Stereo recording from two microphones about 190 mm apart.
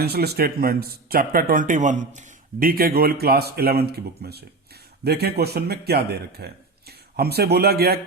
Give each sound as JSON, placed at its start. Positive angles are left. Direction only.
{"t": 0.0, "sound": "speech", "side_deg": -55}